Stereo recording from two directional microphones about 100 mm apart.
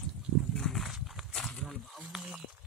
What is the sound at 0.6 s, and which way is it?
Wild animals, centre (ahead or behind).